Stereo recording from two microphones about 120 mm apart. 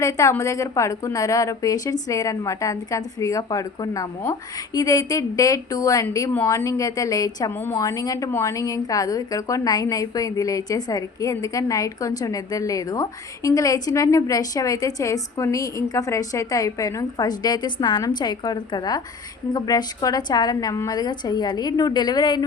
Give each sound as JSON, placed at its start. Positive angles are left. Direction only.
{"t": 0.0, "sound": "a woman's voice", "side_deg": 25}